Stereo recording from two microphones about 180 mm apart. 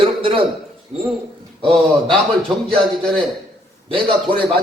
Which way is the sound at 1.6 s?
30° right (ahead or behind).